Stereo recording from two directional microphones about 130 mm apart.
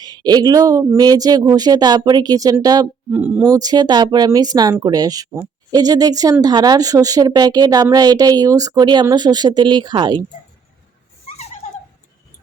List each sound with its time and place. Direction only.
0.0 s speech: 30° right (ahead or behind)
3.1 s speech: 10° right (ahead or behind)
3.5 s a woman's voice: 30° right (ahead or behind)
11.3 s a sound: 60° left (ahead or behind)